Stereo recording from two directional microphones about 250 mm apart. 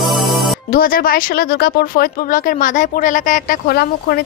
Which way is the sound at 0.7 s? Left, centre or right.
Left.